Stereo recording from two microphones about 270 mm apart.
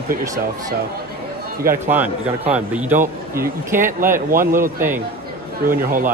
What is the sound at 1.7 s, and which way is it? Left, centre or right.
A man's voice, centre.